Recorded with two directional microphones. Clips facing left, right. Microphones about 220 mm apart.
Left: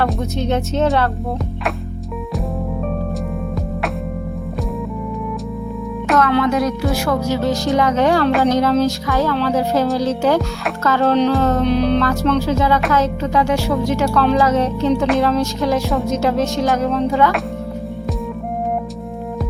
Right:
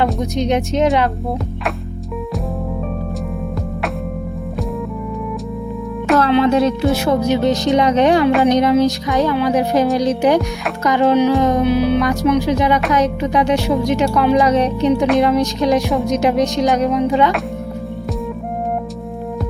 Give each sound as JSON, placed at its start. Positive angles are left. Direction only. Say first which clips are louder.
{"t": 0.0, "sound": "speech", "louder": "right 2 dB", "side_deg": -15}
{"t": 6.1, "sound": "music", "louder": "right 2 dB", "side_deg": -30}
{"t": 6.9, "sound": "speech", "louder": "right 3 dB", "side_deg": -20}